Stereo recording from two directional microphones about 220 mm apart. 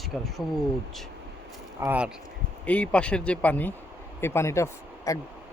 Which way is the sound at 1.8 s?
10° right (ahead or behind).